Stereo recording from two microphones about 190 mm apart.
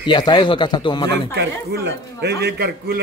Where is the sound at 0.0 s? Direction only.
20° left (ahead or behind).